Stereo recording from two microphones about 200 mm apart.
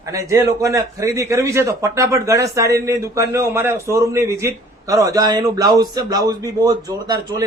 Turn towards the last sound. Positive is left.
turn(degrees=-20)  # may be behind; listen again after turning